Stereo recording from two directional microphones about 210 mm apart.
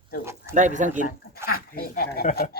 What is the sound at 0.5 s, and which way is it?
Speech, 35° right (ahead or behind).